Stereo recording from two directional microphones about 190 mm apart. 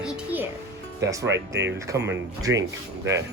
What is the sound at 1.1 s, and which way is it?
Speech, 15° right (ahead or behind).